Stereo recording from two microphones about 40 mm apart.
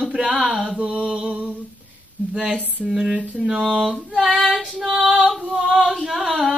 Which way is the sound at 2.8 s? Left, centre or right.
Centre.